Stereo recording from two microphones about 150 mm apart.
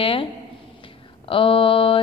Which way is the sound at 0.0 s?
35° left (ahead or behind).